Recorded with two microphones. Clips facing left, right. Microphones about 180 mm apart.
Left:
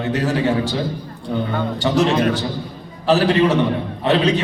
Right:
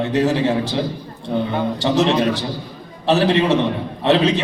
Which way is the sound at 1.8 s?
Centre (ahead or behind).